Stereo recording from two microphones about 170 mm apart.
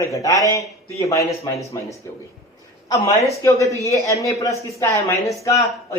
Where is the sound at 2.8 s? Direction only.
20° left (ahead or behind).